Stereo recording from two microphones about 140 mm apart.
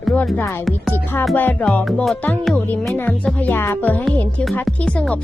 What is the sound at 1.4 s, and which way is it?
Speech, 15° left (ahead or behind).